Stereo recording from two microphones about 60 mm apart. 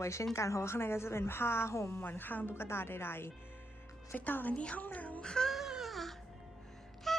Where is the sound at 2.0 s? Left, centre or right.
Left.